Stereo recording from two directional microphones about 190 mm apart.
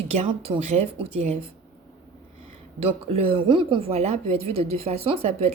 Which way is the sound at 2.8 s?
30° right (ahead or behind).